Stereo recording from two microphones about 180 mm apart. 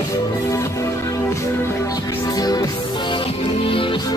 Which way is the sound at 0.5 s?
15° left (ahead or behind).